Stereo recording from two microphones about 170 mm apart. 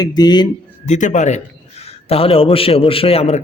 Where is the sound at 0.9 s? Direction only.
45° left (ahead or behind).